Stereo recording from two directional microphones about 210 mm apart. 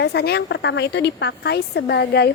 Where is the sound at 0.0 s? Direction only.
50° left (ahead or behind).